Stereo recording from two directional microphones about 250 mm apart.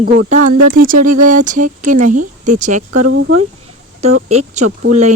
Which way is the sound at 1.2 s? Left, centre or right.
Right.